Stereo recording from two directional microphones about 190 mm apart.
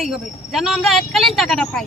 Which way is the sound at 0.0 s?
Centre (ahead or behind).